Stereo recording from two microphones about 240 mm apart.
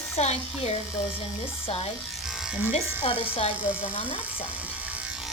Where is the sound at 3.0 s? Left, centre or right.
Left.